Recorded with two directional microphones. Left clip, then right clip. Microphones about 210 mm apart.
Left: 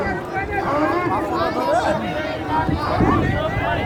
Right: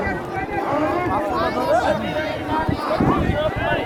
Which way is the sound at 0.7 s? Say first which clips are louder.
Left 1 dB; 55° left (ahead or behind).